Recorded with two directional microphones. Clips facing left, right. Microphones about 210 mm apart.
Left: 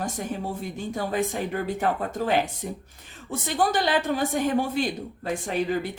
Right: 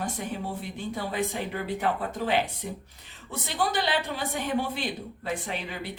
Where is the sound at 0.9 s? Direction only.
45° left (ahead or behind).